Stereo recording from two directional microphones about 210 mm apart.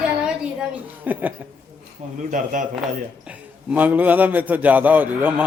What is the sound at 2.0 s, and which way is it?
Speech, 35° right (ahead or behind).